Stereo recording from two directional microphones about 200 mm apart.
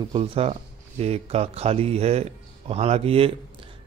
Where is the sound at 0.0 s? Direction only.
30° right (ahead or behind).